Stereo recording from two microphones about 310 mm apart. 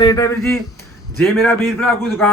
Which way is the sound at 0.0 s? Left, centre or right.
Centre.